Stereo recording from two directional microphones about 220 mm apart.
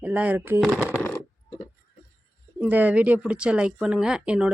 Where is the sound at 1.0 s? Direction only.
20° left (ahead or behind).